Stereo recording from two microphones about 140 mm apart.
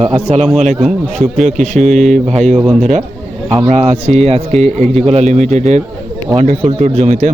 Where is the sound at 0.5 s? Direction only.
55° right (ahead or behind).